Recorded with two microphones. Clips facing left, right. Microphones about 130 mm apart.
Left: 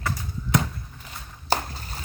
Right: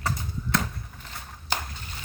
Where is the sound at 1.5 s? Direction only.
35° left (ahead or behind).